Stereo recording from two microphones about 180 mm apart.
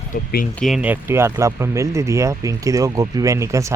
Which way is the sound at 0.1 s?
55° left (ahead or behind).